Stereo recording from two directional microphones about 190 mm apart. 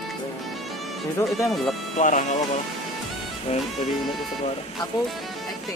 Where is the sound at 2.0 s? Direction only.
40° left (ahead or behind).